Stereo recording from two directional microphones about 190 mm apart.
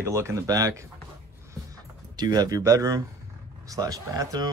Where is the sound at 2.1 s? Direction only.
20° right (ahead or behind).